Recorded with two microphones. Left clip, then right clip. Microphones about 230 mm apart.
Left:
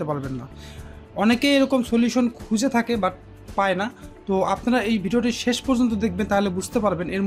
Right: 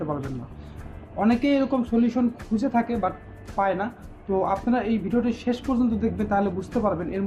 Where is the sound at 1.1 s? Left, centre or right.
Left.